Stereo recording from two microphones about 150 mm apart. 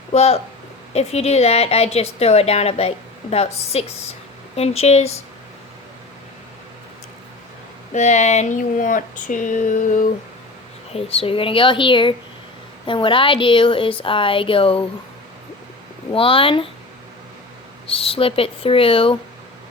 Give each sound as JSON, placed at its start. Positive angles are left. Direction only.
{"t": 0.1, "sound": "a woman's voice", "side_deg": 45}
{"t": 7.9, "sound": "a sound", "side_deg": 50}
{"t": 10.9, "sound": "a woman's voice", "side_deg": 40}
{"t": 16.1, "sound": "a woman's voice", "side_deg": 35}
{"t": 17.8, "sound": "a woman's voice", "side_deg": 40}